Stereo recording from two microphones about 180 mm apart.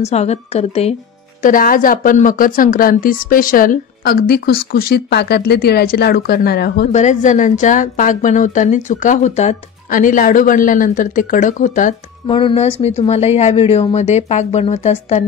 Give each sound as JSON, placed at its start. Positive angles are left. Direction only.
{"t": 0.0, "sound": "speech", "side_deg": 35}
{"t": 1.4, "sound": "speech", "side_deg": 50}
{"t": 6.9, "sound": "a woman's voice", "side_deg": 40}
{"t": 12.3, "sound": "speech", "side_deg": 30}